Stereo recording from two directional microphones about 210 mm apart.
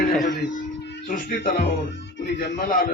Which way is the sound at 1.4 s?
45° left (ahead or behind).